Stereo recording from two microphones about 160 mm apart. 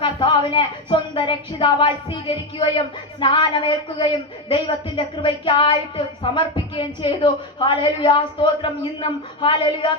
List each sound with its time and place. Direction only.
0.0 s a woman's voice: 30° left (ahead or behind)